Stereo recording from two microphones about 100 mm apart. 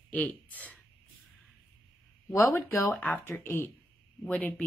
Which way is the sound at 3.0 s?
15° left (ahead or behind).